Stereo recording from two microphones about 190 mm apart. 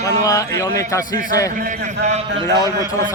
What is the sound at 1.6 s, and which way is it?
Speech, 40° right (ahead or behind).